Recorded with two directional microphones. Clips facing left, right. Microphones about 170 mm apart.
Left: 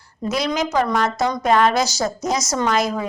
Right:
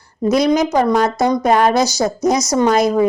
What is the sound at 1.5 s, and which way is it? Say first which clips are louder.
Speech: right 2 dB; 40° right (ahead or behind).